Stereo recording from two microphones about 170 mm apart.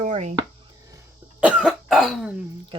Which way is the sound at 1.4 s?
5° right (ahead or behind).